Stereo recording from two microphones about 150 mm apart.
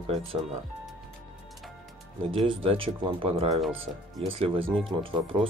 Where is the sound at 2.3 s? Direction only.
35° right (ahead or behind).